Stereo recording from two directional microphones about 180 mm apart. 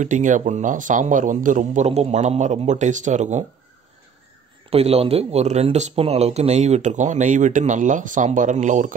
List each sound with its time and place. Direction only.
0.0 s speech: 45° right (ahead or behind)
4.6 s speech: 35° right (ahead or behind)